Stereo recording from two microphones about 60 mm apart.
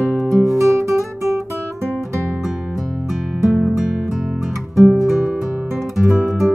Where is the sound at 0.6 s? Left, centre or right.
Right.